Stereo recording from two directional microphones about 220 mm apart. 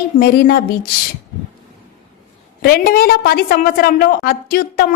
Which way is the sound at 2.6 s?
45° left (ahead or behind).